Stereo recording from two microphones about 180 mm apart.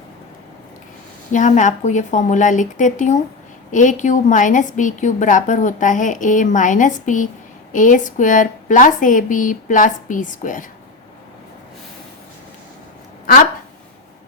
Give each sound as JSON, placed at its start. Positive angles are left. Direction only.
{"t": 1.3, "sound": "a woman's voice", "side_deg": 45}